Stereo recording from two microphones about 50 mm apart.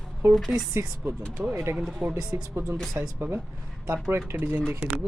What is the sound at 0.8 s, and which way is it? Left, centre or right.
Speech, right.